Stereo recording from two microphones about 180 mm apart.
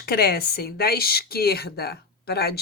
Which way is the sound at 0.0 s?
60° left (ahead or behind).